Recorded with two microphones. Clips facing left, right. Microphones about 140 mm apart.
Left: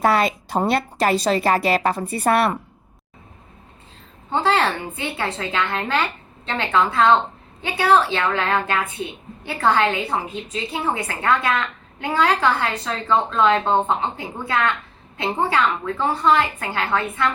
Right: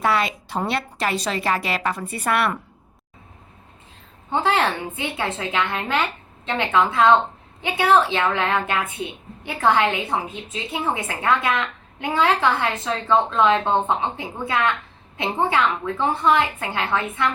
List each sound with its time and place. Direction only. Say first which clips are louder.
0.0 s a woman's voice: left 3 dB; 40° left (ahead or behind)
4.4 s a woman's voice: left 1 dB; 15° right (ahead or behind)